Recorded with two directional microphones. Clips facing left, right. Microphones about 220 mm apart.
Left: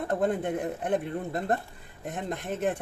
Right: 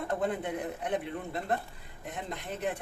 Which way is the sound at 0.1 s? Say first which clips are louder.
Left 5 dB; 50° left (ahead or behind).